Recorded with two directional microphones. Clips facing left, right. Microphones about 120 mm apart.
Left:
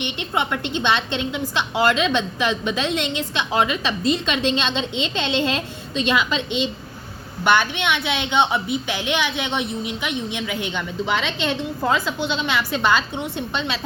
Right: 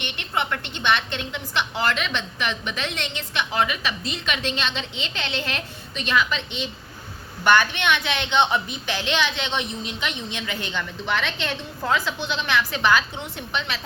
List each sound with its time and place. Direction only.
0.0 s a woman's voice: 15° left (ahead or behind)
7.4 s a woman's voice: 15° left (ahead or behind)